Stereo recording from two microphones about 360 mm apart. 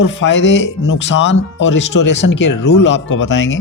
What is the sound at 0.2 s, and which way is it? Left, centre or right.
Speech, left.